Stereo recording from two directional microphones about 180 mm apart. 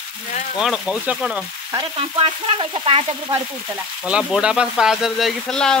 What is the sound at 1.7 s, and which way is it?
Frying, 30° right (ahead or behind).